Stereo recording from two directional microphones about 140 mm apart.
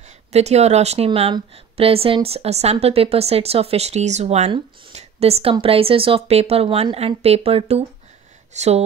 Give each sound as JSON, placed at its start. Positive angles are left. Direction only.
{"t": 0.3, "sound": "speech", "side_deg": -50}